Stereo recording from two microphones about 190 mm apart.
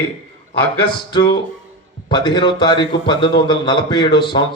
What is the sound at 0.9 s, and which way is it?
A man's voice, 25° left (ahead or behind).